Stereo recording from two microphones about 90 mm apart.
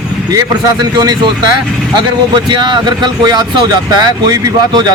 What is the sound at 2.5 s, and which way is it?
A man's voice, 60° right (ahead or behind).